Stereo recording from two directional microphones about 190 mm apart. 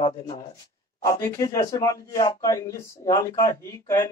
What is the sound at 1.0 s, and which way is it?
Speech, 15° left (ahead or behind).